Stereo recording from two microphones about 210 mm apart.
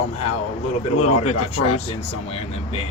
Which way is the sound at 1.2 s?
30° left (ahead or behind).